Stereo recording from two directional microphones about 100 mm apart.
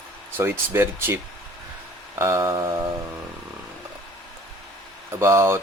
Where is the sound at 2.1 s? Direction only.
30° right (ahead or behind).